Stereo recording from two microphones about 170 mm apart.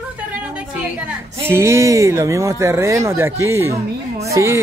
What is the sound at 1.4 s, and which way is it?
Speech, 15° right (ahead or behind).